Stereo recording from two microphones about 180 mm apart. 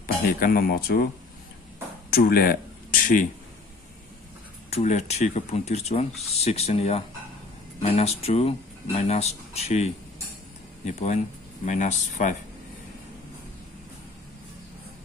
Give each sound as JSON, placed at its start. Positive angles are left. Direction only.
{"t": 0.0, "sound": "speech", "side_deg": 55}
{"t": 2.1, "sound": "speech", "side_deg": 55}
{"t": 4.6, "sound": "speech", "side_deg": 35}